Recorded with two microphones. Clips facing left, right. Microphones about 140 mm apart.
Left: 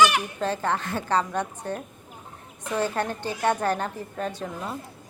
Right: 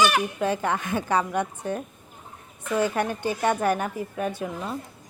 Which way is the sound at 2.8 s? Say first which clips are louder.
Right 2 dB; 15° right (ahead or behind).